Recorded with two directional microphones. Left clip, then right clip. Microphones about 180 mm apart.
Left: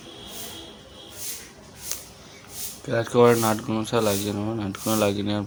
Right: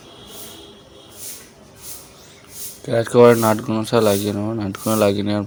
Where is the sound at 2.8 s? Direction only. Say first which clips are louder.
Right 6 dB; 30° right (ahead or behind).